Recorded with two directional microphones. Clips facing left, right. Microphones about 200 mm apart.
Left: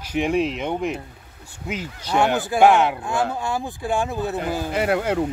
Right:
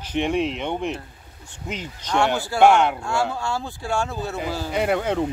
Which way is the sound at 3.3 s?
15° left (ahead or behind).